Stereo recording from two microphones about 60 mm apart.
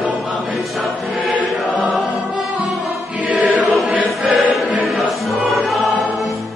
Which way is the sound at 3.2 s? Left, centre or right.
Right.